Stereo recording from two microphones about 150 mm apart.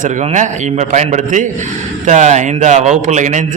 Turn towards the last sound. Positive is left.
turn(degrees=-55)  # may be behind; listen again after turning